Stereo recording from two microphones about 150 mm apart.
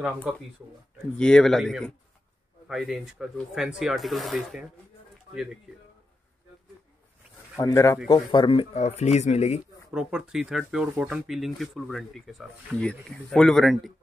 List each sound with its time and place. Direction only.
1.1 s speech: 5° left (ahead or behind)
7.6 s speech: 20° left (ahead or behind)
8.1 s speech: 30° left (ahead or behind); by 9.6 s 50° left (ahead or behind)
9.9 s speech: 5° right (ahead or behind)